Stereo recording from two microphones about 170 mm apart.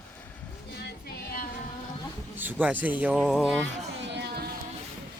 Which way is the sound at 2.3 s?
10° right (ahead or behind).